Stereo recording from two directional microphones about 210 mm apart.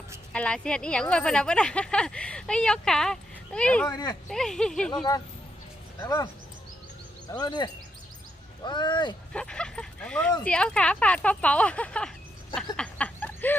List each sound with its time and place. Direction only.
0.3 s a woman's voice: 5° left (ahead or behind)
3.8 s speech: 20° left (ahead or behind)
4.3 s a woman's voice: centre (ahead or behind)
6.0 s speech: 15° left (ahead or behind)
7.3 s speech: 20° left (ahead or behind)
9.3 s a woman's voice: 5° left (ahead or behind)
12.7 s a sound: 5° left (ahead or behind)